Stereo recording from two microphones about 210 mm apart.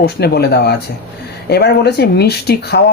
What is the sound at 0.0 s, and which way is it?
Speech, 50° left (ahead or behind).